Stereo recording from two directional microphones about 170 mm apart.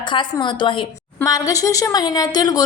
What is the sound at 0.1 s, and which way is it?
A woman's voice, 25° left (ahead or behind).